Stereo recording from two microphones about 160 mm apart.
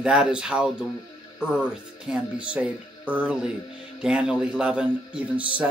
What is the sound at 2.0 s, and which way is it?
Speech, 5° right (ahead or behind).